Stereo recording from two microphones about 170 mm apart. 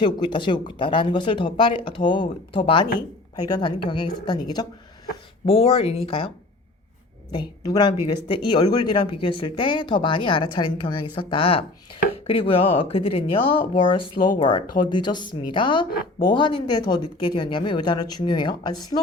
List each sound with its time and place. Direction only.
0.0 s speech: 25° left (ahead or behind)
7.3 s speech: 25° left (ahead or behind)